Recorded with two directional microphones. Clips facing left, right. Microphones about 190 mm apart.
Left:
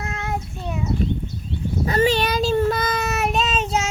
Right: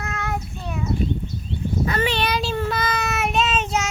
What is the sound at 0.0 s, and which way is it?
Child singing, 25° left (ahead or behind).